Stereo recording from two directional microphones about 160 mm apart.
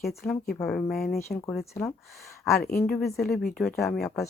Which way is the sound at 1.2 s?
15° left (ahead or behind).